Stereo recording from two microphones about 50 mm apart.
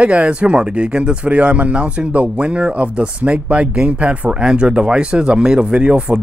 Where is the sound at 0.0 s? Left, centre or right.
Right.